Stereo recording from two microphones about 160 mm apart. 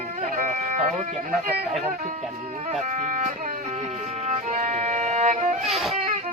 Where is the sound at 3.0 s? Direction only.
50° right (ahead or behind).